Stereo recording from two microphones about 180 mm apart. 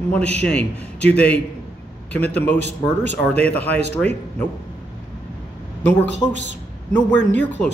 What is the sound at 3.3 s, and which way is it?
Speech, 10° left (ahead or behind).